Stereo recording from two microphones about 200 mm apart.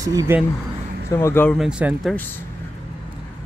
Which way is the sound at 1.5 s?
5° right (ahead or behind).